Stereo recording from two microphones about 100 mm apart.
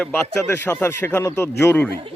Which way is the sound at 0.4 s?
25° left (ahead or behind).